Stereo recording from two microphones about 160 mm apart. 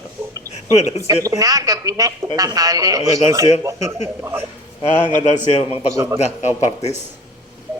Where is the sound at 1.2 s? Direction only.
20° right (ahead or behind).